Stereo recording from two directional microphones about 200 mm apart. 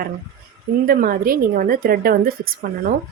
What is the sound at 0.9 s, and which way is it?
A woman's voice, 45° right (ahead or behind).